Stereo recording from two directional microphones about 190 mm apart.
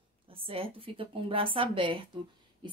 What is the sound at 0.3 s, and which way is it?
Speech, 30° right (ahead or behind).